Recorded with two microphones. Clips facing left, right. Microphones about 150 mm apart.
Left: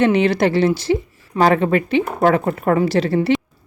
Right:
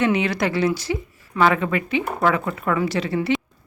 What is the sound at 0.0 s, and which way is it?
A woman's voice, 30° left (ahead or behind).